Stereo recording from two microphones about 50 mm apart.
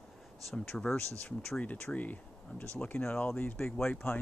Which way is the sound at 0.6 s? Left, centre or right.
Centre.